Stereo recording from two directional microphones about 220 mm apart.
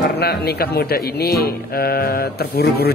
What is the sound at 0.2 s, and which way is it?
Speech, 45° left (ahead or behind).